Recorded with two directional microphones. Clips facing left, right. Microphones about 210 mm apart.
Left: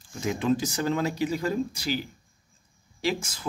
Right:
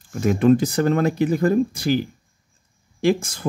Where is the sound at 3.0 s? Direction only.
50° right (ahead or behind).